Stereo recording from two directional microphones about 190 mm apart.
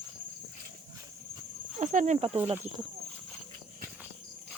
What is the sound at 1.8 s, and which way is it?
Speech, 40° right (ahead or behind).